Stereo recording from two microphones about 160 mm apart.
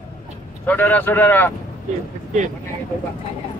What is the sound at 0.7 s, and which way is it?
Speech, 10° left (ahead or behind).